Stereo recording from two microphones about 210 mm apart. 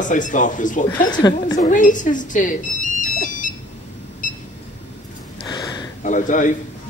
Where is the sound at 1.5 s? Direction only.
35° left (ahead or behind).